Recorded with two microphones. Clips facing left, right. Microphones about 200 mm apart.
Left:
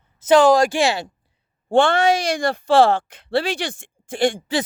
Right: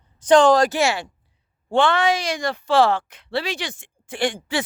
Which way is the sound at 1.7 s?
45° left (ahead or behind).